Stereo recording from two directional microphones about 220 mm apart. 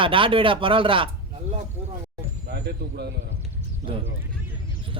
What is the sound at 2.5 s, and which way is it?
Speech, 45° right (ahead or behind).